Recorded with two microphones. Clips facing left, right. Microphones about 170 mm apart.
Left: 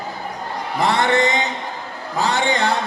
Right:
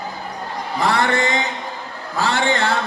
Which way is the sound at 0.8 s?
20° left (ahead or behind).